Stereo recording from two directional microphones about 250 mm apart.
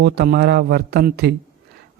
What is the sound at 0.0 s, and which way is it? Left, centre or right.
Speech, right.